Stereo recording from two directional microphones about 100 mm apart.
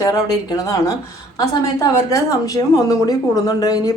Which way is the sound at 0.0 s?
35° left (ahead or behind).